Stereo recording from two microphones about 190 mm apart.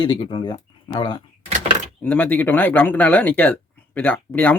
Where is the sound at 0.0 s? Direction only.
25° left (ahead or behind).